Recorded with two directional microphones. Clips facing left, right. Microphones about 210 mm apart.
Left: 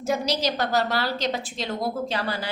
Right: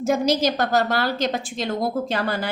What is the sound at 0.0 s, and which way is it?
A woman's voice, 50° right (ahead or behind).